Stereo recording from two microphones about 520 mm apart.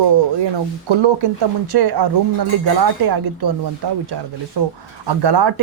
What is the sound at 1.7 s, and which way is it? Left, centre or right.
Speech, right.